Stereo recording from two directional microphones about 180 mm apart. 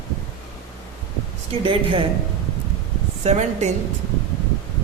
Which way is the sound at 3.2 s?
40° right (ahead or behind).